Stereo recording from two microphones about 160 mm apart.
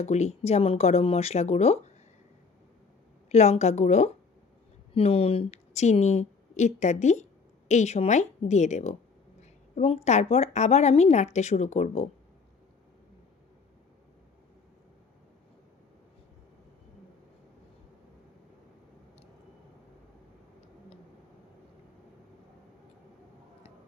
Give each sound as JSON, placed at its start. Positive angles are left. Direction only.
{"t": 0.0, "sound": "speech", "side_deg": 45}
{"t": 3.2, "sound": "a woman's voice", "side_deg": 40}